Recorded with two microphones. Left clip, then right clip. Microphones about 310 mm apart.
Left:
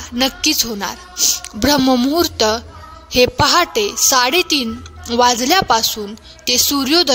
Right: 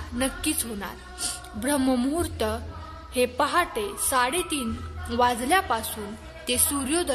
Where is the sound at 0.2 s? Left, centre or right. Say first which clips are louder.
Left 12 dB; left.